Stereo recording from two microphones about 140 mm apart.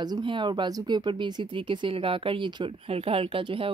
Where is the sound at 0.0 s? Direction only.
35° right (ahead or behind).